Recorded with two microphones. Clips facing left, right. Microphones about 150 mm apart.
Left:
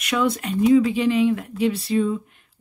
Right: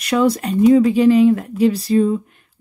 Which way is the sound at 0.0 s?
35° right (ahead or behind).